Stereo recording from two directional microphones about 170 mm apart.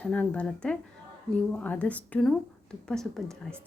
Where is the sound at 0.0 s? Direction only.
5° left (ahead or behind).